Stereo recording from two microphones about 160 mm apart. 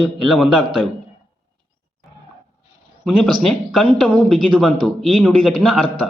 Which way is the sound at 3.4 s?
5° left (ahead or behind).